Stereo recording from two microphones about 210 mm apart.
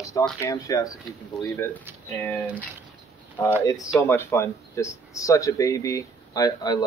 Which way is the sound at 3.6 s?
15° left (ahead or behind).